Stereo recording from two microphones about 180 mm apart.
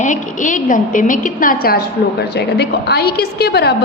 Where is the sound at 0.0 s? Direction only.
45° left (ahead or behind).